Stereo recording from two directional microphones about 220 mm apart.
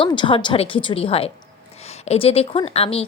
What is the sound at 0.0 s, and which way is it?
A woman's voice, 20° left (ahead or behind).